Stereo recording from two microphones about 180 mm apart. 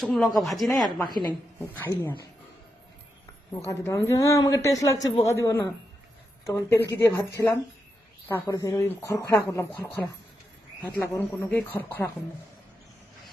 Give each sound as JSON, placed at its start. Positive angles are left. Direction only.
{"t": 0.0, "sound": "speech", "side_deg": 5}
{"t": 0.6, "sound": "speech", "side_deg": 20}
{"t": 3.7, "sound": "a woman's voice", "side_deg": 15}